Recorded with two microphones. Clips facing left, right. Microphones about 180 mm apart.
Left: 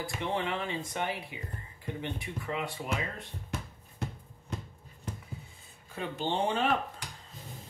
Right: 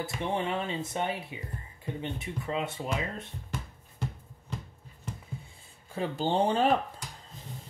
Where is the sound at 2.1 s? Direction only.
25° right (ahead or behind).